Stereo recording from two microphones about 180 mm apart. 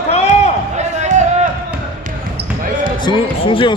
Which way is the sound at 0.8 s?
40° right (ahead or behind).